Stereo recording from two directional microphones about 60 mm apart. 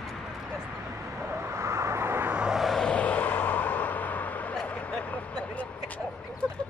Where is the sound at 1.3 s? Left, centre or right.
Right.